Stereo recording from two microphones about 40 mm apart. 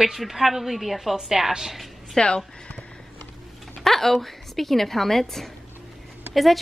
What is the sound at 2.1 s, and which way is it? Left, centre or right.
Speech, left.